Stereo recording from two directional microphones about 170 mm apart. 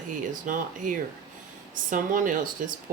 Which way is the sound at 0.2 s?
50° right (ahead or behind).